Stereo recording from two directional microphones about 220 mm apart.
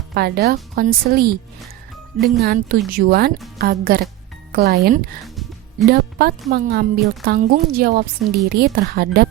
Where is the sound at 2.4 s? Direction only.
45° right (ahead or behind).